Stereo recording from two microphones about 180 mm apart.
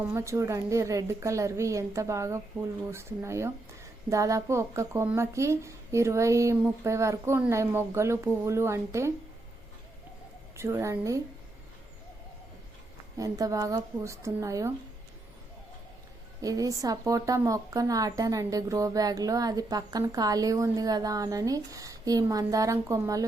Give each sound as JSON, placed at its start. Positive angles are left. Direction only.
{"t": 0.0, "sound": "a woman's voice", "side_deg": -15}
{"t": 10.6, "sound": "a woman's voice", "side_deg": -15}
{"t": 13.1, "sound": "a woman's voice", "side_deg": -20}
{"t": 16.4, "sound": "a woman's voice", "side_deg": -20}